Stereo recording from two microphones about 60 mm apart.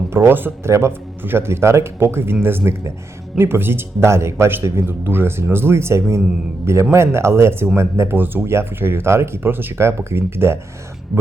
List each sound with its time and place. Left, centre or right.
0.1 s speech: right
0.7 s speech: right
8.4 s speech: right